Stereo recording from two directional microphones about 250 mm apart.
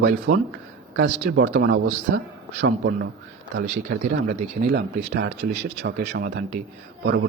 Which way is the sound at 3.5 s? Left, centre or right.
Right.